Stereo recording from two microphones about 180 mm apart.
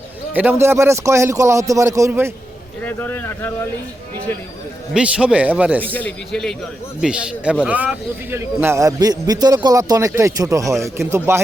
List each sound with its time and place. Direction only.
0.3 s speech: 10° right (ahead or behind)
2.8 s a man's voice: 10° left (ahead or behind)
4.9 s speech: 5° right (ahead or behind)
5.8 s a man's voice: 10° left (ahead or behind); by 11.4 s 15° right (ahead or behind)